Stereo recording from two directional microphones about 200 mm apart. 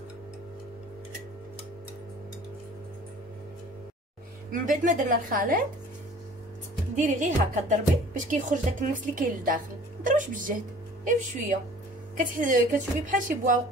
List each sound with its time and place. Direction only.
4.5 s a woman's voice: 40° right (ahead or behind)
7.0 s speech: 35° right (ahead or behind)
12.2 s speech: 40° right (ahead or behind)